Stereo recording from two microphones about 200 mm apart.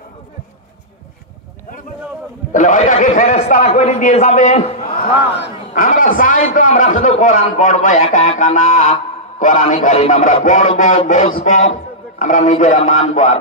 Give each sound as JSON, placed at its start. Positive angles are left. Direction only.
{"t": 2.5, "sound": "a man's voice", "side_deg": 40}